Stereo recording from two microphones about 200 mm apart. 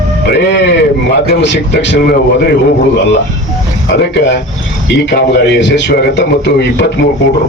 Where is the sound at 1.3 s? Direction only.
60° left (ahead or behind).